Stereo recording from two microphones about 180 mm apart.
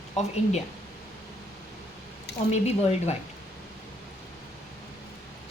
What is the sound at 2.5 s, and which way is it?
Speech, 35° left (ahead or behind).